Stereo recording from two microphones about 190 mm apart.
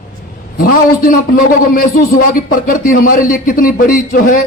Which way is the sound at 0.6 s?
50° left (ahead or behind).